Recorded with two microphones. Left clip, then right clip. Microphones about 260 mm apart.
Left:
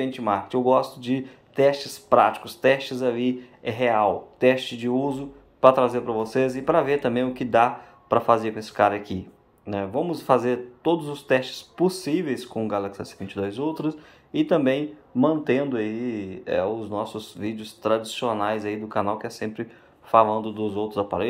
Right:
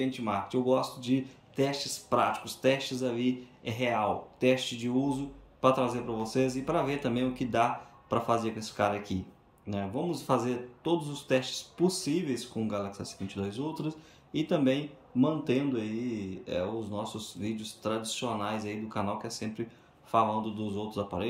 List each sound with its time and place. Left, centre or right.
0.0 s speech: centre